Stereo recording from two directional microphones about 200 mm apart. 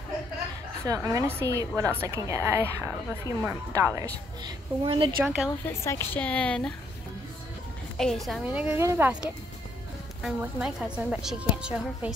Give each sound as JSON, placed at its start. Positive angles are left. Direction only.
{"t": 0.8, "sound": "a woman's voice", "side_deg": -15}
{"t": 4.8, "sound": "a woman's voice", "side_deg": -25}
{"t": 5.2, "sound": "a woman's voice", "side_deg": -5}
{"t": 5.7, "sound": "a woman's voice", "side_deg": 10}
{"t": 8.0, "sound": "a woman's voice", "side_deg": 0}